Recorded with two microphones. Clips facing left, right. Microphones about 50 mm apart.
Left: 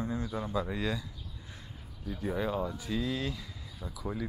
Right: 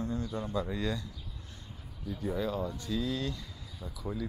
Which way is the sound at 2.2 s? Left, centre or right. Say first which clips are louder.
Left 1 dB; centre.